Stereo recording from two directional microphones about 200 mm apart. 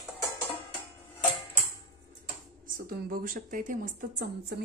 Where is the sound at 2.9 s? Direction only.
50° right (ahead or behind).